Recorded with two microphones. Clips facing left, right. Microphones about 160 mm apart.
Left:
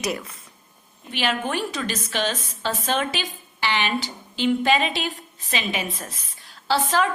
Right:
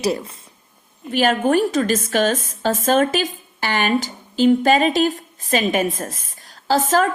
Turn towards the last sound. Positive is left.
turn(degrees=-45)  # may be behind; listen again after turning